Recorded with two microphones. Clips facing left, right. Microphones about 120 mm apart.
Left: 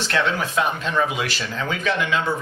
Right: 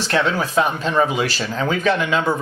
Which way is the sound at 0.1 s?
35° right (ahead or behind).